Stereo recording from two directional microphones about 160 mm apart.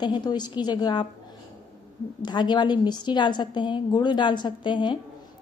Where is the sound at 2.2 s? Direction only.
25° left (ahead or behind).